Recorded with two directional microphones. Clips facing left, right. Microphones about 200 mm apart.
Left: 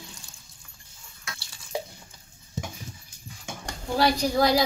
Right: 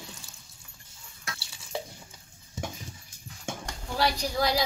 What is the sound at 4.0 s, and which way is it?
Speech, 50° left (ahead or behind).